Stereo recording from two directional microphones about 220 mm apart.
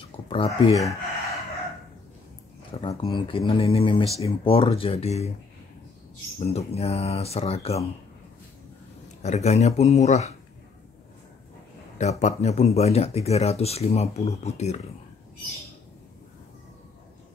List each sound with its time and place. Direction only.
0.3 s speech: 25° left (ahead or behind)
2.8 s speech: 20° left (ahead or behind)
6.4 s speech: 30° left (ahead or behind)
9.2 s speech: 30° left (ahead or behind)
12.0 s speech: 30° left (ahead or behind)